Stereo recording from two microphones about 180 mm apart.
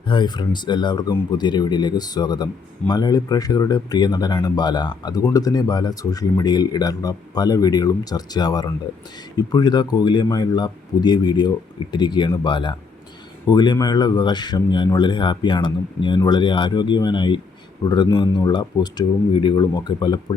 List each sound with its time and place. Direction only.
0.1 s speech: 25° left (ahead or behind)